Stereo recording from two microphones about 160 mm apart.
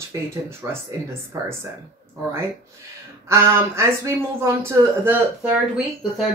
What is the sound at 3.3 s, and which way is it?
Speech, 15° right (ahead or behind).